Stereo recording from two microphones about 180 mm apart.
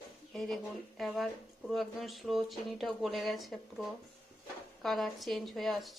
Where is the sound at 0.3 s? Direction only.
Centre (ahead or behind).